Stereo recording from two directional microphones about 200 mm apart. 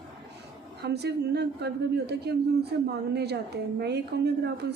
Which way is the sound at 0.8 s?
55° right (ahead or behind).